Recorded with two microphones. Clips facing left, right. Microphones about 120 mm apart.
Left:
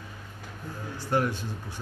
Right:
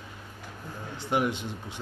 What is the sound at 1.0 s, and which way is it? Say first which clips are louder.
Speech: even; 20° right (ahead or behind).